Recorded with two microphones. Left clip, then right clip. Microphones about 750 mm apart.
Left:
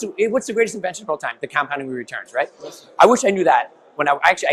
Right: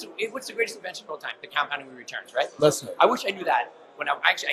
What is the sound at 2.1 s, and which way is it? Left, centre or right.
Speech, left.